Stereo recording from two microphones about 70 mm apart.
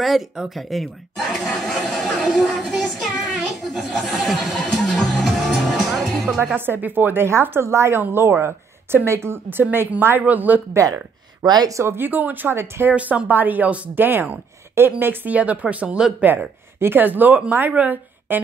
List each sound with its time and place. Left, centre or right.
0.6 s chuckle: centre
3.0 s child singing: centre
3.7 s speech: centre
5.2 s music: centre
6.4 s speech: right
10.7 s speech: right
11.4 s speech: right
11.7 s speech: right
12.9 s speech: right